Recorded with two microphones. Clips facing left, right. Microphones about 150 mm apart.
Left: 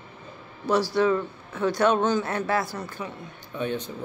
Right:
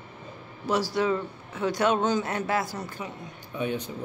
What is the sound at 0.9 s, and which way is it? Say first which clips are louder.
Speech: left 3 dB; 20° right (ahead or behind).